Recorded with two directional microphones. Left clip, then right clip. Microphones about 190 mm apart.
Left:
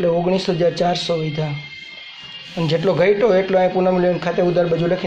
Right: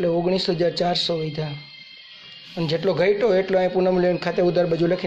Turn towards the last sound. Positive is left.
turn(degrees=-20)  # may be behind; listen again after turning